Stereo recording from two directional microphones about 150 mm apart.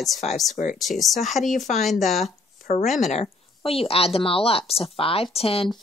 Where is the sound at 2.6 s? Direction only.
55° left (ahead or behind).